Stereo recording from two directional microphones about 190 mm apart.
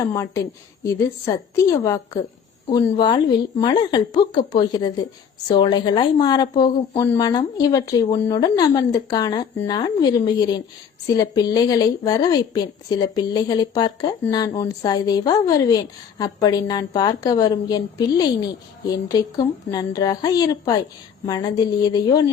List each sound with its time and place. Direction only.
0.0 s a woman's voice: 15° left (ahead or behind)
21.8 s a woman's voice: 20° left (ahead or behind)